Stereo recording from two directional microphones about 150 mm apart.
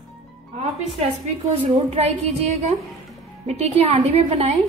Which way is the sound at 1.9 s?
45° right (ahead or behind).